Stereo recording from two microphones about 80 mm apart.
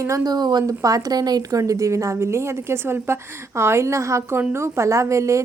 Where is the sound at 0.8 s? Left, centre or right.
Right.